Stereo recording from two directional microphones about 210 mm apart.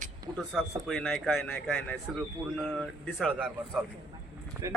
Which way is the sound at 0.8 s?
Centre (ahead or behind).